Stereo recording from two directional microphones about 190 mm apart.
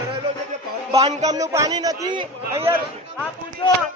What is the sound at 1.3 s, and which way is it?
A man's voice, 15° right (ahead or behind).